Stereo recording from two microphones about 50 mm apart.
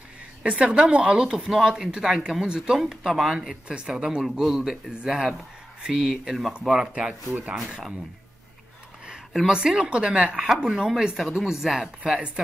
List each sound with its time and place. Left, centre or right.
0.4 s speech: right
2.8 s speech: centre
3.6 s speech: centre
9.0 s a sound: centre
9.5 s speech: centre